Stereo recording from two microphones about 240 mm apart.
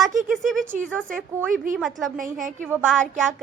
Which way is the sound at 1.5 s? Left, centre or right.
Right.